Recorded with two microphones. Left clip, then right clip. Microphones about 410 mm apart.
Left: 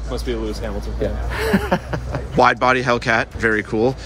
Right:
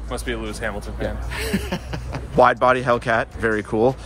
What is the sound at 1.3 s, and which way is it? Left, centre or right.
Speech, centre.